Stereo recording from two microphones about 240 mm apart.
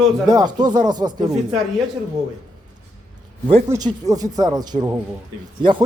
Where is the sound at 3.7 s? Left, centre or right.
Centre.